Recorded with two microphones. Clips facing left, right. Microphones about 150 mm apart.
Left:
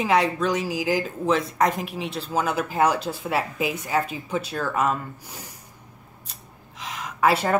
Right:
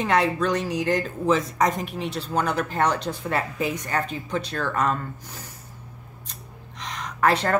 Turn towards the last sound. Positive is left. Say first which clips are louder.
# left 1 dB
turn(degrees=5)  # may be behind; listen again after turning